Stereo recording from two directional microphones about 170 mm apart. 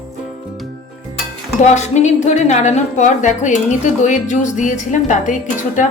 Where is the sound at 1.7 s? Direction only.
45° left (ahead or behind).